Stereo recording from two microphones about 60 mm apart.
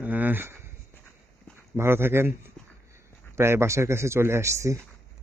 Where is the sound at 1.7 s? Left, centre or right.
Right.